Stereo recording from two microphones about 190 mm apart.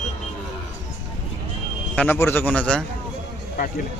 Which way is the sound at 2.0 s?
10° left (ahead or behind).